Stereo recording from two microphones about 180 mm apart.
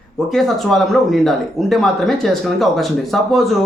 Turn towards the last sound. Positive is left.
turn(degrees=0)  # may be behind; listen again after turning